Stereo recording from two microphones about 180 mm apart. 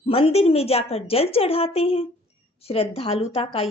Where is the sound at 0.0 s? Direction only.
35° left (ahead or behind).